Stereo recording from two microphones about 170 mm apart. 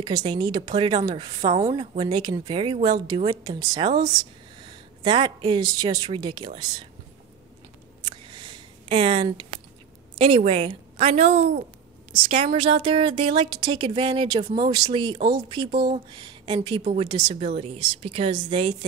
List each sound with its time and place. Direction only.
0.0 s speech: 25° right (ahead or behind)
8.3 s a sound: 30° right (ahead or behind)
10.1 s a woman's voice: 30° right (ahead or behind)